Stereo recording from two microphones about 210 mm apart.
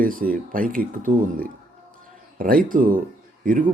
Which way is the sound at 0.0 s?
40° right (ahead or behind).